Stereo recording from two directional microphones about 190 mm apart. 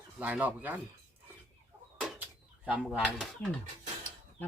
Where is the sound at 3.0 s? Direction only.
5° left (ahead or behind).